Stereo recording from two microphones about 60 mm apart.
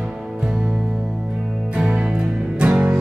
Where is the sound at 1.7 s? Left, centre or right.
Centre.